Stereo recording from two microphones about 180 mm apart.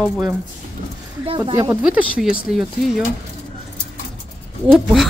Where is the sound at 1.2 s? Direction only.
25° right (ahead or behind).